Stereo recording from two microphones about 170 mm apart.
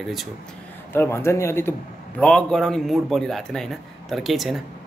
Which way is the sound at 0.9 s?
15° left (ahead or behind).